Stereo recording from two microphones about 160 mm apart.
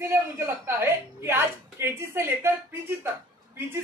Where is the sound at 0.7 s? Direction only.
15° right (ahead or behind).